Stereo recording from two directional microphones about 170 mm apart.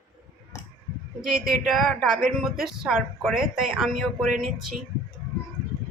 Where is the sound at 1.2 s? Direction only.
Centre (ahead or behind).